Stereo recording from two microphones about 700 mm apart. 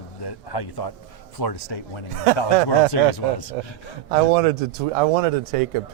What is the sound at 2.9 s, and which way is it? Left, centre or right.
Speech, left.